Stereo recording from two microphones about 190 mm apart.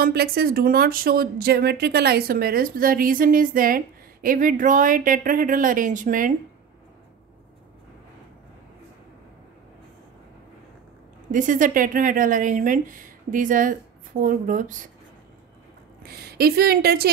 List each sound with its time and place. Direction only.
0.0 s speech: 55° right (ahead or behind)
11.3 s speech: 45° right (ahead or behind)
16.0 s speech: 55° right (ahead or behind)